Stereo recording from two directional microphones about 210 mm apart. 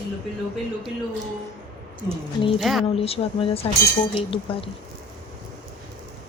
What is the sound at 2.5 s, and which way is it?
Speech, centre (ahead or behind).